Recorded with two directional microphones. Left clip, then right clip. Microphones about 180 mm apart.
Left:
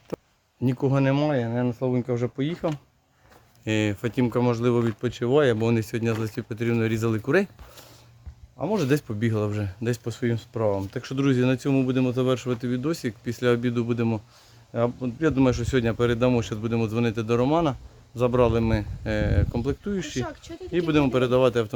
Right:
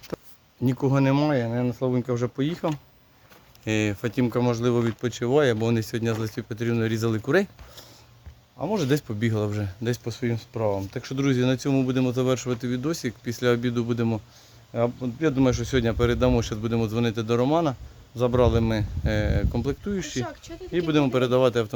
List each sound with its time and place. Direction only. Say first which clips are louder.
0.1 s a sound: left 1 dB; centre (ahead or behind)
0.6 s speech: even; centre (ahead or behind)
3.6 s speech: even; centre (ahead or behind)
20.2 s speech: even; 25° left (ahead or behind)
20.7 s speech: even; 5° left (ahead or behind)